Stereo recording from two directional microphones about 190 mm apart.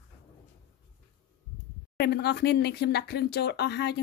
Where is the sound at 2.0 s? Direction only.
60° left (ahead or behind).